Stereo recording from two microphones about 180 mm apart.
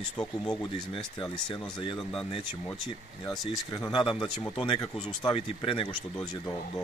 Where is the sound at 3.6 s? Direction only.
25° left (ahead or behind).